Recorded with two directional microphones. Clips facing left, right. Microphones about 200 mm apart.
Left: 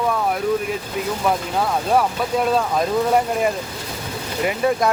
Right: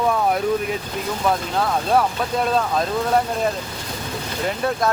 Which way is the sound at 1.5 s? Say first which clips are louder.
Even; 10° left (ahead or behind).